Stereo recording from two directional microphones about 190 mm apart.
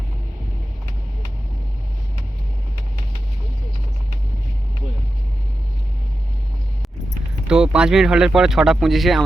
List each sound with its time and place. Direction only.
7.4 s speech: 5° right (ahead or behind)